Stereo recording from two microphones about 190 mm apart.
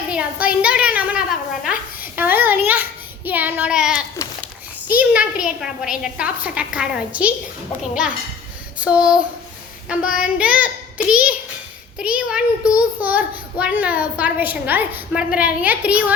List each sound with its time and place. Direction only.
0.1 s a child's voice: 5° right (ahead or behind)
4.9 s a child's voice: 5° right (ahead or behind)
8.8 s a woman's voice: 5° right (ahead or behind)
10.0 s child singing: 45° left (ahead or behind)
10.3 s a child's voice: 5° right (ahead or behind)